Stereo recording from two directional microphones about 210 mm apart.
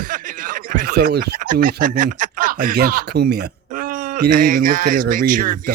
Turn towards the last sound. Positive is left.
turn(degrees=-40)  # may be behind; listen again after turning